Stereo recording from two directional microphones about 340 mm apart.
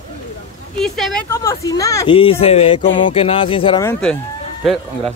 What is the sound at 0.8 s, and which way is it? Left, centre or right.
Speech, centre.